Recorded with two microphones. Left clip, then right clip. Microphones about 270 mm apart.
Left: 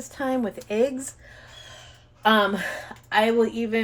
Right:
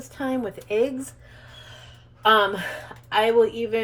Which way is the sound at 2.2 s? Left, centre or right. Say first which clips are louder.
Right 2 dB; left.